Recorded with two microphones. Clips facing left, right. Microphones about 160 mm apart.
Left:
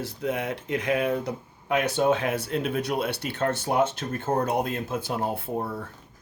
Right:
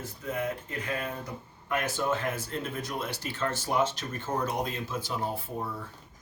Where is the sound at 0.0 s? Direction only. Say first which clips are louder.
Left 4 dB; 80° left.